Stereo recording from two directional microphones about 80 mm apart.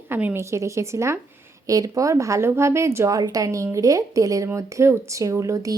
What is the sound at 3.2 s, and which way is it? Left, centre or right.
A woman's voice, right.